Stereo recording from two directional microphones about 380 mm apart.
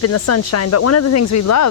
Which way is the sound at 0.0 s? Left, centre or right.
Left.